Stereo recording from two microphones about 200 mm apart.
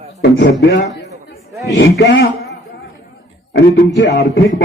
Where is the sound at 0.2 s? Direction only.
65° left (ahead or behind).